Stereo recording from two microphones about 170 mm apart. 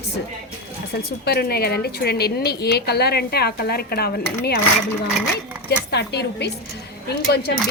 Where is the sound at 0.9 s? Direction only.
70° left (ahead or behind).